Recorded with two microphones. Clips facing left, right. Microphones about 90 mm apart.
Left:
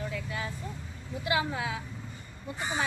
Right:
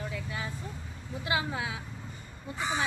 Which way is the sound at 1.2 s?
25° right (ahead or behind).